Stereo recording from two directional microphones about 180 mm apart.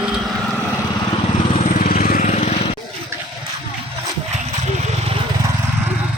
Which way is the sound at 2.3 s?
40° left (ahead or behind).